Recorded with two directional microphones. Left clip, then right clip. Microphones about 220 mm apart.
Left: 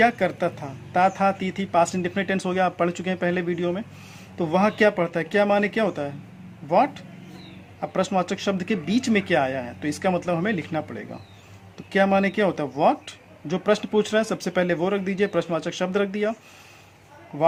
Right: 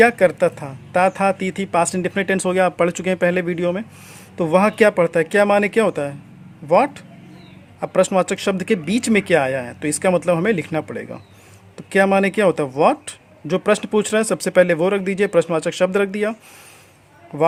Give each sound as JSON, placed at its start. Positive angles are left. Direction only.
{"t": 0.0, "sound": "speech", "side_deg": -55}